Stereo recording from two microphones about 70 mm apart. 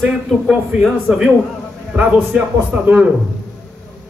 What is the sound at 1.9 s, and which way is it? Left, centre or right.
A man's voice, centre.